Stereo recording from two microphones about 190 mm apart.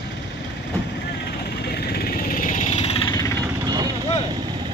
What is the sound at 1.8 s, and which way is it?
Vehicle, 55° left (ahead or behind).